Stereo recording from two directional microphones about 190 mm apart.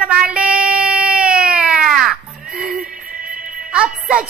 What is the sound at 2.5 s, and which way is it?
Music, centre (ahead or behind).